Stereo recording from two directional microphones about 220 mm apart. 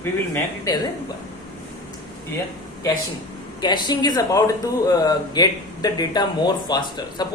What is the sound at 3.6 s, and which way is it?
Speech, 20° left (ahead or behind).